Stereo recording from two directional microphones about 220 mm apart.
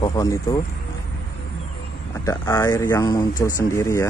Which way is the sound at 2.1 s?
10° left (ahead or behind).